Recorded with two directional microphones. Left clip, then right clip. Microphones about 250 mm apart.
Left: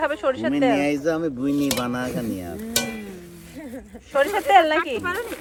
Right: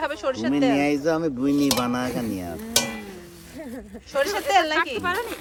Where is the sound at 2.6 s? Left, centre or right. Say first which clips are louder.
Right 2 dB; centre.